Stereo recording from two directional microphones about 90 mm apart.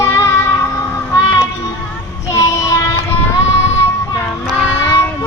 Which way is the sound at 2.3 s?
35° left (ahead or behind).